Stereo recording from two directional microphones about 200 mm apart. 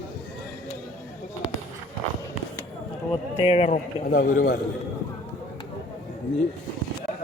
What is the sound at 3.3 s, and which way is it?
A man's voice, 30° left (ahead or behind).